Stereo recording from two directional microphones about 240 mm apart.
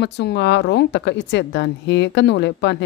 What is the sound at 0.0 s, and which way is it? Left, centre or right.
Speech, left.